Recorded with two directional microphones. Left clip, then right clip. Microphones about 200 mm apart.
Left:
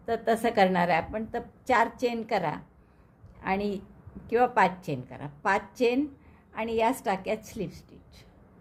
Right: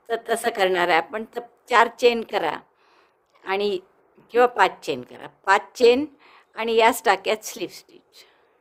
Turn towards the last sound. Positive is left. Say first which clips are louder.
# right 5 dB
turn(degrees=-40)  # may be behind; listen again after turning